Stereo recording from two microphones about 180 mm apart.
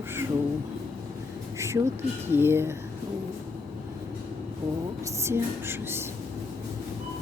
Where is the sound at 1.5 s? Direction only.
15° right (ahead or behind).